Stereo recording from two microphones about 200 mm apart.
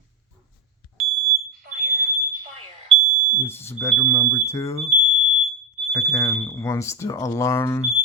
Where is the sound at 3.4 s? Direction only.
10° left (ahead or behind).